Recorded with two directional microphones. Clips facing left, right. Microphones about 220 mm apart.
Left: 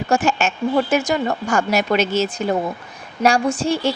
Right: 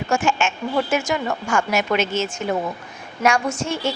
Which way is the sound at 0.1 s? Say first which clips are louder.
Left 2 dB; 35° left (ahead or behind).